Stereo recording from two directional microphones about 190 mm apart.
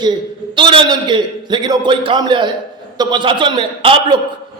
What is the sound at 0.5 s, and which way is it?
A man's voice, 25° right (ahead or behind).